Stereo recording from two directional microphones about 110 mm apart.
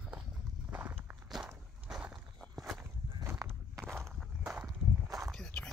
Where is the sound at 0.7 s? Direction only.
20° right (ahead or behind).